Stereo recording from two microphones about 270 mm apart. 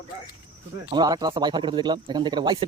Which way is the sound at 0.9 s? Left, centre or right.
Centre.